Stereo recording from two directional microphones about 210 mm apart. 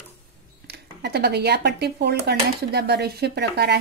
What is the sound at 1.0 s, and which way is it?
Speech, 50° right (ahead or behind).